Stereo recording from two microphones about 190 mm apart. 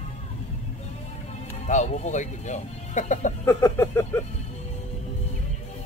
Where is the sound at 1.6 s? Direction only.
40° left (ahead or behind).